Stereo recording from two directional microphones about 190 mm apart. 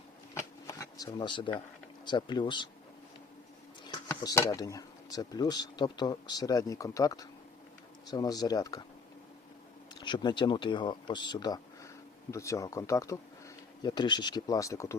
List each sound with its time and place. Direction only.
0.3 s a sound: 20° left (ahead or behind)
2.0 s speech: 25° left (ahead or behind)
4.1 s speech: 15° left (ahead or behind)
10.0 s speech: 25° left (ahead or behind)